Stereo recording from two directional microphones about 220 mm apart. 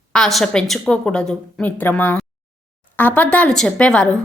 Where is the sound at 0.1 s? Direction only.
Centre (ahead or behind).